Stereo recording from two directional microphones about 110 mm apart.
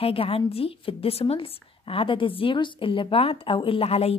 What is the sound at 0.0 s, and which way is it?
A woman's voice, 60° left (ahead or behind).